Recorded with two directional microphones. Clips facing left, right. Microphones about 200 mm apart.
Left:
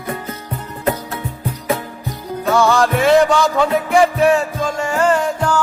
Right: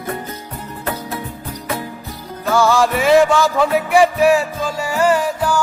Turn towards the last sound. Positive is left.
turn(degrees=-10)  # may be behind; listen again after turning